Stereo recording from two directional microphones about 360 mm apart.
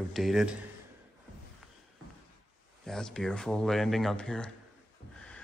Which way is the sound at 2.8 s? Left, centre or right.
Centre.